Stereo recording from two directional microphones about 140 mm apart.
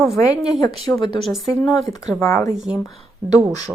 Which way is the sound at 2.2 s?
20° left (ahead or behind).